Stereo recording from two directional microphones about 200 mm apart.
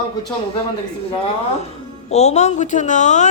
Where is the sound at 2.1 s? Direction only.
35° left (ahead or behind).